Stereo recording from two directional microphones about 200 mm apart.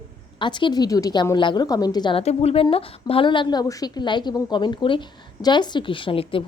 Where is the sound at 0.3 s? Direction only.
25° left (ahead or behind).